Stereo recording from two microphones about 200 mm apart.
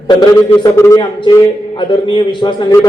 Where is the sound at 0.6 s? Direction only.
15° left (ahead or behind).